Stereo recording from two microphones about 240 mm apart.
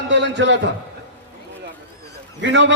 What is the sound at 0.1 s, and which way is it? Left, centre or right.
Speech, right.